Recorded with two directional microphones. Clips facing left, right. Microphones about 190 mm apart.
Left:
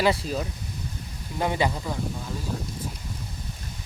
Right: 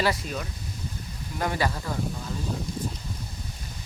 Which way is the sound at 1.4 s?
20° left (ahead or behind).